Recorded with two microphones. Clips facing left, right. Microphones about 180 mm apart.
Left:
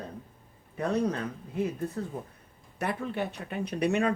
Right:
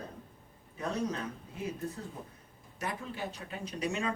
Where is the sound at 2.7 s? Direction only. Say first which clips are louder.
Left 7 dB; 65° left (ahead or behind).